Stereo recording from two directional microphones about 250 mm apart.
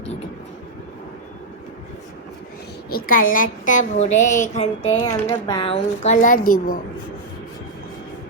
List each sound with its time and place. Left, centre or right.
2.9 s a woman's voice: left